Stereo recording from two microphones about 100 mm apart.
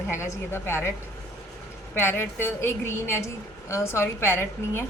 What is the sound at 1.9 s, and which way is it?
A woman's voice, 25° left (ahead or behind).